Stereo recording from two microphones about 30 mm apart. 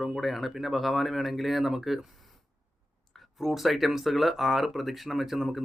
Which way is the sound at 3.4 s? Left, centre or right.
Centre.